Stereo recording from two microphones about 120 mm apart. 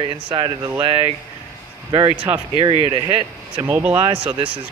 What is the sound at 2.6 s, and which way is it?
Speech, 50° right (ahead or behind).